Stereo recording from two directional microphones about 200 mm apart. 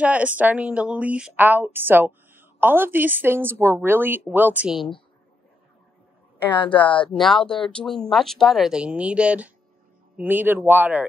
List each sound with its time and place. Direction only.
0.0 s speech: 5° right (ahead or behind)
6.5 s a woman's voice: 25° left (ahead or behind)
7.1 s speech: centre (ahead or behind)